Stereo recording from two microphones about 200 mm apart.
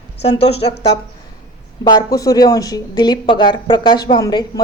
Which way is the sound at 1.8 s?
20° left (ahead or behind).